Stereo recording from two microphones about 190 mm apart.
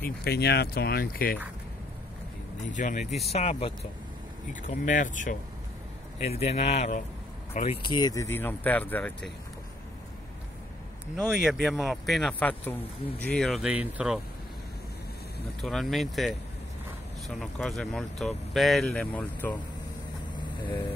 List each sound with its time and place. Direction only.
0.0 s speech: 55° left (ahead or behind)
2.7 s speech: 40° left (ahead or behind)
4.5 s speech: 40° left (ahead or behind)
7.8 s speech: 20° left (ahead or behind)
11.2 s speech: 5° right (ahead or behind)
15.6 s speech: centre (ahead or behind)
17.4 s speech: centre (ahead or behind)
20.5 s vehicle: 25° left (ahead or behind)